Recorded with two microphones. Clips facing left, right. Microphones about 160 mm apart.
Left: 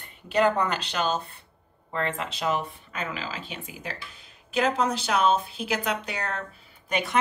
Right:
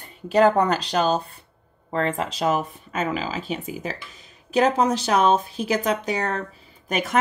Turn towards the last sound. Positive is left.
turn(degrees=-45)  # may be behind; listen again after turning